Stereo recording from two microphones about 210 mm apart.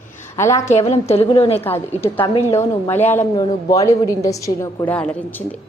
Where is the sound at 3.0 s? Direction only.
10° left (ahead or behind).